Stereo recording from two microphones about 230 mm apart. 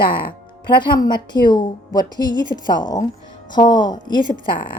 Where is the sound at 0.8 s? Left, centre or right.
Centre.